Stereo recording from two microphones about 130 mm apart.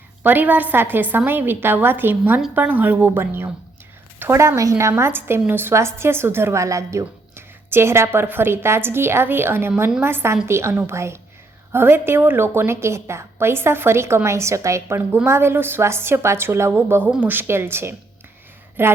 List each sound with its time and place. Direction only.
0.2 s a woman's voice: 15° right (ahead or behind)